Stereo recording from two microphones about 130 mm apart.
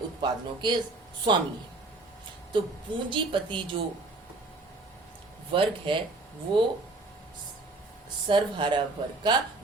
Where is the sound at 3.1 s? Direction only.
40° right (ahead or behind).